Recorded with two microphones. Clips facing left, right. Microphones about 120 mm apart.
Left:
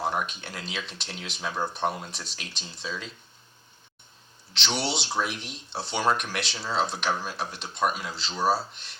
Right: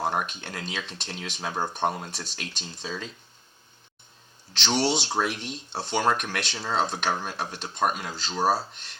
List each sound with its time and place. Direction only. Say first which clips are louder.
0.0 s speech: right 1 dB; 45° right (ahead or behind)
4.6 s speech: right 5 dB; 40° right (ahead or behind)